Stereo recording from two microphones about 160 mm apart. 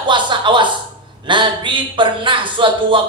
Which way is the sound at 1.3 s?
30° right (ahead or behind).